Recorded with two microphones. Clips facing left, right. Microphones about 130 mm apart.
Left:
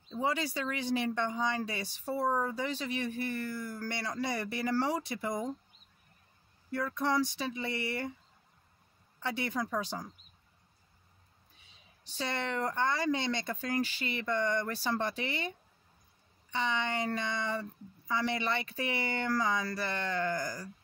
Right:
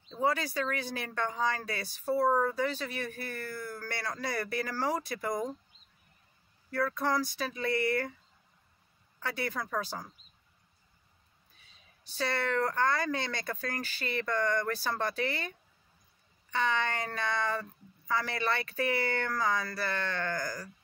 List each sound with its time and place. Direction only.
0.1 s speech: 20° left (ahead or behind)
6.7 s speech: 20° left (ahead or behind)
9.2 s speech: 20° left (ahead or behind)
12.2 s speech: 20° left (ahead or behind)